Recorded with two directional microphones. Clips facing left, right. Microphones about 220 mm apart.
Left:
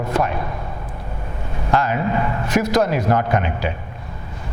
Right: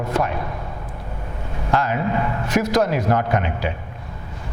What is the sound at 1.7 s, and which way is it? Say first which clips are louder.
Speech: left 1 dB; 15° left (ahead or behind).